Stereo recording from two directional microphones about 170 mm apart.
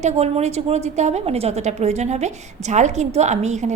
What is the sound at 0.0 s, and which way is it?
A woman's voice, 40° right (ahead or behind).